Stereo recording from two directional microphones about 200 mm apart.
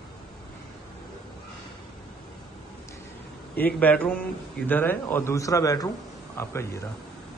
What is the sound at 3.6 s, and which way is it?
Speech, 10° left (ahead or behind).